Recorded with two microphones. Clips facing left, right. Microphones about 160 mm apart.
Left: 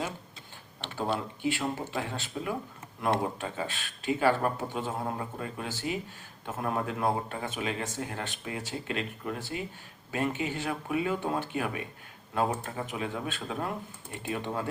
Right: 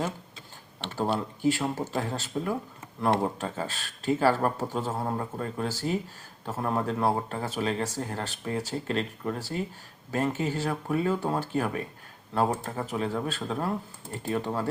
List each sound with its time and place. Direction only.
0.9 s speech: 40° right (ahead or behind)